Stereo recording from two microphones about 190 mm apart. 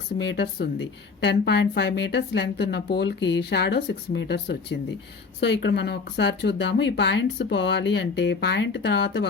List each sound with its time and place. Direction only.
0.2 s a woman's voice: 65° left (ahead or behind)